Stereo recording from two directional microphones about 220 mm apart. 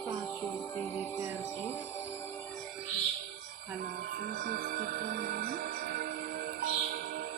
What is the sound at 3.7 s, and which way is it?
Music, 40° right (ahead or behind).